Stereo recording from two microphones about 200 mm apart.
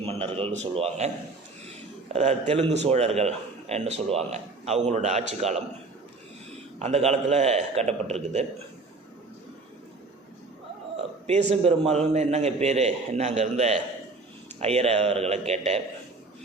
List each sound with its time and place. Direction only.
0.0 s a man's voice: 25° right (ahead or behind)
2.1 s a man's voice: 35° right (ahead or behind)
6.7 s a man's voice: 35° right (ahead or behind)
10.9 s a sound: 35° right (ahead or behind)
11.5 s a man's voice: 30° right (ahead or behind)